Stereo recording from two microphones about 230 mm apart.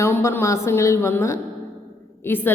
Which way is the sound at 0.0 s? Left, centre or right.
Centre.